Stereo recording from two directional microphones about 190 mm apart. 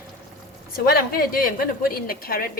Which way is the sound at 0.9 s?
50° left (ahead or behind).